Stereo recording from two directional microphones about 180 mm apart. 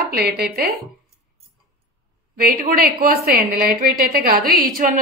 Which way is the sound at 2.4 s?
55° right (ahead or behind).